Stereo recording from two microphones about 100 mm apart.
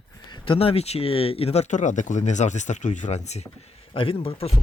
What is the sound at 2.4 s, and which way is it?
Speech, 90° left.